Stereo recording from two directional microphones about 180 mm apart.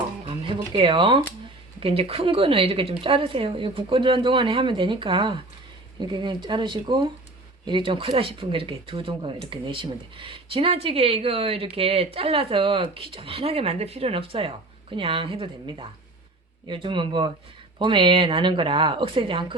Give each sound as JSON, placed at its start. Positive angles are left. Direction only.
{"t": 0.3, "sound": "a woman's voice", "side_deg": -30}